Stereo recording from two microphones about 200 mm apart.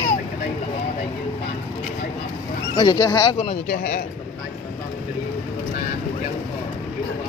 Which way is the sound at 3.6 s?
45° left (ahead or behind).